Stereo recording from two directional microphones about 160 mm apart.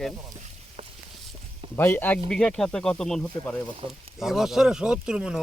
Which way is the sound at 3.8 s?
35° right (ahead or behind).